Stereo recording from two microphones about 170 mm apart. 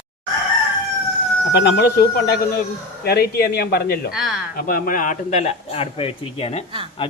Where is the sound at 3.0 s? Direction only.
65° left (ahead or behind).